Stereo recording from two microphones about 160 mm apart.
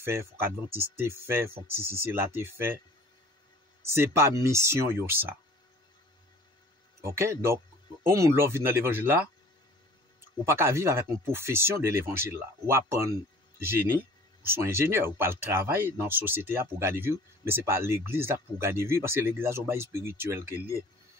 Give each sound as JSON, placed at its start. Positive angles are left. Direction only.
{"t": 0.0, "sound": "speech", "side_deg": -15}
{"t": 3.8, "sound": "speech", "side_deg": -15}
{"t": 7.0, "sound": "speech", "side_deg": -15}
{"t": 10.4, "sound": "speech", "side_deg": -15}